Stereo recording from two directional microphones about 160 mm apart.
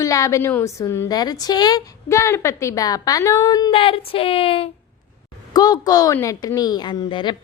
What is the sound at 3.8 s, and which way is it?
Speech, 35° left (ahead or behind).